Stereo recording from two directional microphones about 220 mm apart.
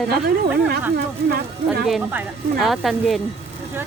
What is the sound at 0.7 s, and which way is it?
Speech, 45° right (ahead or behind).